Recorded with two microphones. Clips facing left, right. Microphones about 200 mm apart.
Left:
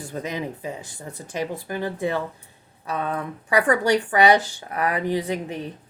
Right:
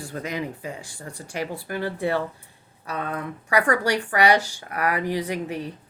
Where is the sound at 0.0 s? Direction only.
20° left (ahead or behind).